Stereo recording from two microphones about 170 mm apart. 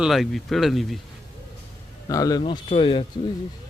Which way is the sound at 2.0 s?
20° left (ahead or behind).